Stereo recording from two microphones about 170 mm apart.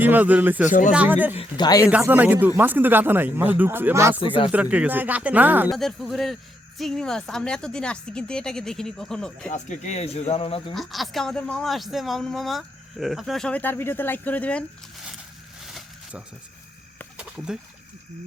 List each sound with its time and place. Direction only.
0.0 s speech: 10° right (ahead or behind)
0.7 s speech: 50° left (ahead or behind)
0.9 s speech: 10° right (ahead or behind)
1.4 s speech: 25° left (ahead or behind)
1.9 s speech: 10° right (ahead or behind)
5.7 s speech: centre (ahead or behind)
9.5 s speech: 45° left (ahead or behind)
10.8 s speech: centre (ahead or behind)
15.6 s a sound: centre (ahead or behind)